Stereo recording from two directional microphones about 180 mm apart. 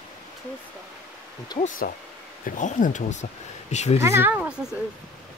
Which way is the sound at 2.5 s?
45° left (ahead or behind).